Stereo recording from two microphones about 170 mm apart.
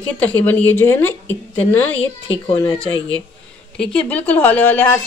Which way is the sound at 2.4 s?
30° left (ahead or behind).